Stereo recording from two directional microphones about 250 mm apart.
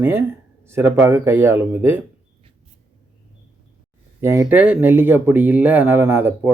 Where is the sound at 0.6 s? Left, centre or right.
Centre.